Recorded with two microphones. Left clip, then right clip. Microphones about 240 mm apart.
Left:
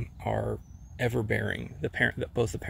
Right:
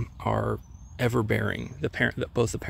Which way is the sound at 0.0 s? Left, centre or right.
Right.